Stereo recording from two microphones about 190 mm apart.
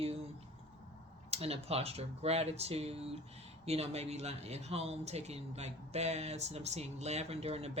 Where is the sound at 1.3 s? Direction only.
30° right (ahead or behind).